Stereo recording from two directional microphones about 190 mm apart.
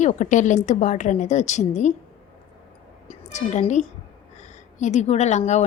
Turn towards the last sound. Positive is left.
turn(degrees=35)  # may be behind; listen again after turning